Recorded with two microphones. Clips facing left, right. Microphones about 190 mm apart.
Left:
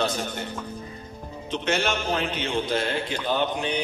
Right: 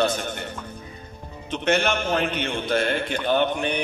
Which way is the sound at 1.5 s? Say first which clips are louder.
Right 3 dB; 60° right (ahead or behind).